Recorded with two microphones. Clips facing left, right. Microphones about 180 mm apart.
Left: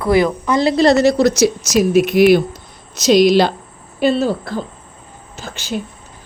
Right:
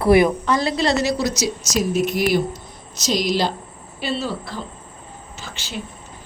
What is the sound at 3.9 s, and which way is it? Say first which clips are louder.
A woman's voice: left 10 dB; 50° left (ahead or behind).